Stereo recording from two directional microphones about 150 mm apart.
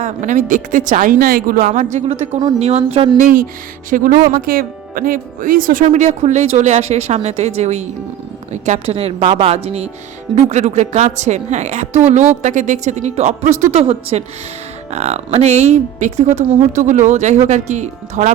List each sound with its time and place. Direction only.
0.0 s speech: 55° right (ahead or behind)
3.2 s speech: 60° right (ahead or behind)
5.8 s a woman's voice: 50° right (ahead or behind)